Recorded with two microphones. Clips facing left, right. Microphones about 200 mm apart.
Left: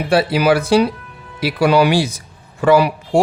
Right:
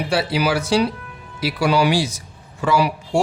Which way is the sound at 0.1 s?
55° left (ahead or behind).